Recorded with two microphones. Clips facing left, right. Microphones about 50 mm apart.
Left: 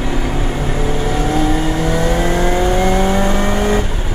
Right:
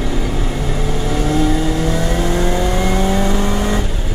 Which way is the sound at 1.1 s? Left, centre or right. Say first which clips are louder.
Right 1 dB; left.